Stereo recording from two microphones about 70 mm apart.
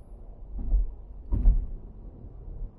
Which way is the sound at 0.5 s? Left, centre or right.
Centre.